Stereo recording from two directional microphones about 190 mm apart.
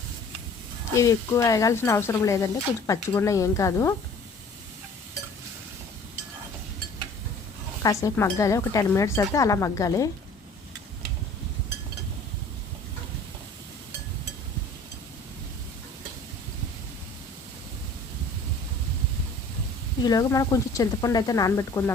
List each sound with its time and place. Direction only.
0.9 s speech: 15° left (ahead or behind)
7.8 s speech: 15° left (ahead or behind)
20.0 s speech: 20° left (ahead or behind)